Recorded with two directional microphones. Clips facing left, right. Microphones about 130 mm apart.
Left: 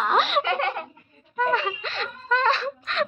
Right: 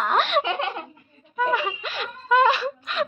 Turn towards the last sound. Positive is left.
turn(degrees=-10)  # may be behind; listen again after turning